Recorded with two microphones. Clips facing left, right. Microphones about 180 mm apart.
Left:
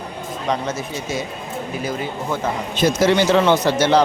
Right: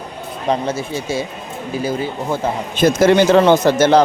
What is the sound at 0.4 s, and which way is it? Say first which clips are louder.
Speech: right 4 dB; 30° right (ahead or behind).